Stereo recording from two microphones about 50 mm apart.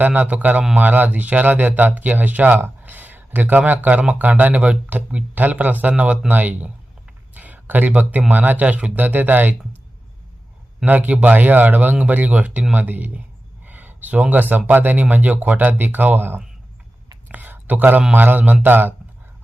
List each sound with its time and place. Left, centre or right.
0.0 s speech: right
10.8 s speech: right
13.7 s a sound: right
14.7 s speech: right
17.2 s a sound: right
18.1 s speech: right